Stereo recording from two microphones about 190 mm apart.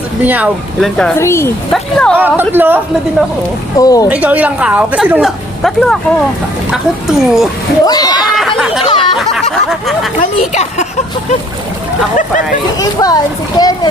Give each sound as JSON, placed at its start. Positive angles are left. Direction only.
{"t": 0.2, "sound": "speech", "side_deg": -10}
{"t": 1.1, "sound": "speech", "side_deg": 15}
{"t": 1.7, "sound": "speech", "side_deg": 5}
{"t": 2.1, "sound": "a woman's voice", "side_deg": -10}
{"t": 3.7, "sound": "speech", "side_deg": 20}
{"t": 4.1, "sound": "a woman's voice", "side_deg": -10}
{"t": 7.8, "sound": "speech", "side_deg": 20}
{"t": 8.4, "sound": "chatter", "side_deg": 0}
{"t": 9.2, "sound": "a sound", "side_deg": 0}
{"t": 10.2, "sound": "speech", "side_deg": 40}
{"t": 12.7, "sound": "speech", "side_deg": 20}